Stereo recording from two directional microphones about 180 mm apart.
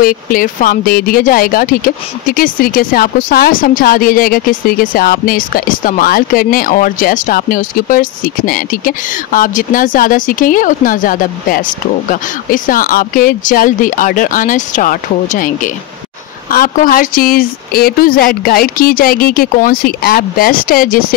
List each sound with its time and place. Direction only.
0.0 s speech: 50° left (ahead or behind)